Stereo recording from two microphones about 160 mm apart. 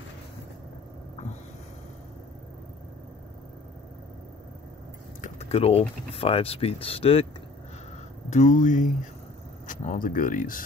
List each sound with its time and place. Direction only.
5.2 s speech: 40° left (ahead or behind)
8.3 s speech: 50° left (ahead or behind)